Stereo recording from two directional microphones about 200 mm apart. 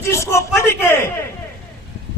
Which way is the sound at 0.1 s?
15° left (ahead or behind).